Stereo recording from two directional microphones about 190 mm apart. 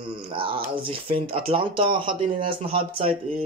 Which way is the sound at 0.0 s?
25° right (ahead or behind).